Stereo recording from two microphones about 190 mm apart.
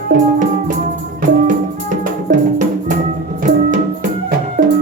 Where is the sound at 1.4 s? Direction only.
40° right (ahead or behind).